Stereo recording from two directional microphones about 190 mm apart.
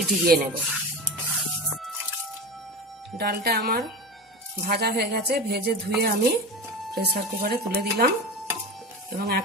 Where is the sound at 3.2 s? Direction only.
55° right (ahead or behind).